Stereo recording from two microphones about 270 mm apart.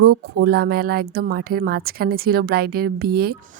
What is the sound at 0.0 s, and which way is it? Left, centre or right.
Speech, right.